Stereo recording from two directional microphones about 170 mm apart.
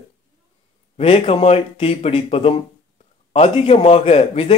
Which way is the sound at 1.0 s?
35° left (ahead or behind).